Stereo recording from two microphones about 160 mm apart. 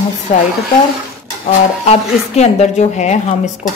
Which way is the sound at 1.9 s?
45° left (ahead or behind).